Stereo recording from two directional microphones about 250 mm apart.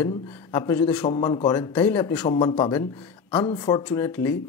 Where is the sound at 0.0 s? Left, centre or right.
Centre.